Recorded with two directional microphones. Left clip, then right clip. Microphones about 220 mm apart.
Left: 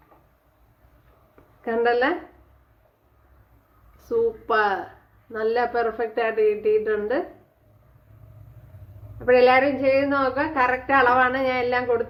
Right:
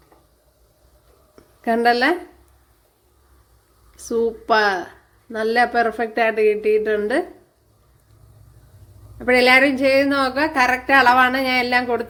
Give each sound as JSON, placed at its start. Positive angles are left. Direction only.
{"t": 1.6, "sound": "a woman's voice", "side_deg": -40}
{"t": 4.1, "sound": "a woman's voice", "side_deg": -40}
{"t": 9.1, "sound": "a woman's voice", "side_deg": -40}